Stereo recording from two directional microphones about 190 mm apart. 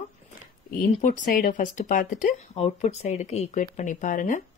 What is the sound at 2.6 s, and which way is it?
Speech, 35° left (ahead or behind).